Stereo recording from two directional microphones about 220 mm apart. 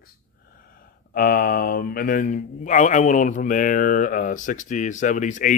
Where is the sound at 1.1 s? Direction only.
40° left (ahead or behind).